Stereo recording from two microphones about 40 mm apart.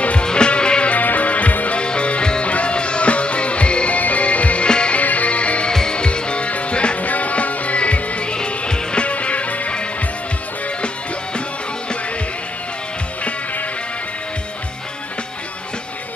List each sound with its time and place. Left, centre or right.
0.0 s music: left
0.9 s music: left
1.8 s music: left
4.6 s music: left
4.9 s music: left
5.7 s music: centre
7.0 s music: left